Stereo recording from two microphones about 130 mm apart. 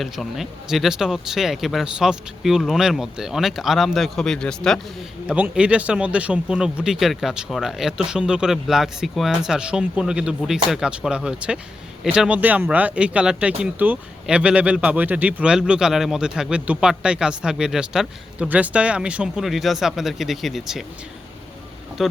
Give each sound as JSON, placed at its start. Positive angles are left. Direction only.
{"t": 0.0, "sound": "speech", "side_deg": 0}
{"t": 5.3, "sound": "speech", "side_deg": -10}
{"t": 22.0, "sound": "speech", "side_deg": 0}